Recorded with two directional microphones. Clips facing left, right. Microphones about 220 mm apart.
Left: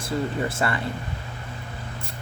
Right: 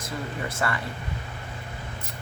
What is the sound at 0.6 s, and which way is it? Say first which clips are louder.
Speech: left 1 dB; 25° left (ahead or behind).